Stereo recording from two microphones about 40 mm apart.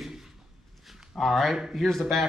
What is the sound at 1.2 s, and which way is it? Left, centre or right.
Speech, centre.